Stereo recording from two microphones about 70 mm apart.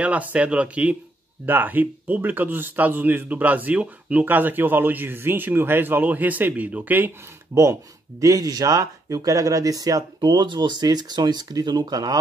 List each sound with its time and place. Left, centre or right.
0.0 s a man's voice: centre
8.2 s speech: right